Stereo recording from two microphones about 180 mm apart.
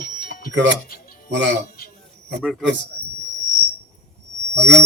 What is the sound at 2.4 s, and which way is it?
Speech, centre (ahead or behind).